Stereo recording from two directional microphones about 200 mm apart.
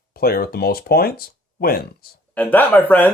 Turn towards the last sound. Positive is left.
turn(degrees=10)  # may be behind; listen again after turning